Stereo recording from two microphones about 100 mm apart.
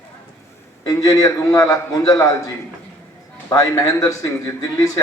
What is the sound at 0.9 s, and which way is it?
A man's voice, 35° left (ahead or behind).